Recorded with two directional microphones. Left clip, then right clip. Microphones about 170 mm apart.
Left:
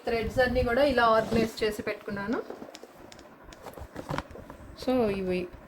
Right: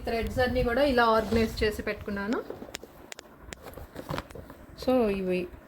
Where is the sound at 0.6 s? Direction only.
60° right (ahead or behind).